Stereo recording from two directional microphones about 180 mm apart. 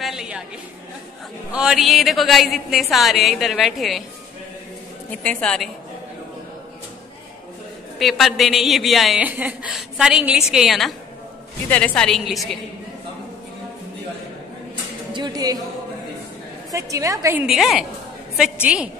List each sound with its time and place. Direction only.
0.0 s a sound: 5° right (ahead or behind)
1.5 s a woman's voice: 5° right (ahead or behind)
5.2 s a woman's voice: 5° left (ahead or behind)
8.0 s a woman's voice: centre (ahead or behind)
15.1 s a woman's voice: 25° right (ahead or behind)
16.7 s a woman's voice: 20° right (ahead or behind)
17.5 s a woman's voice: centre (ahead or behind)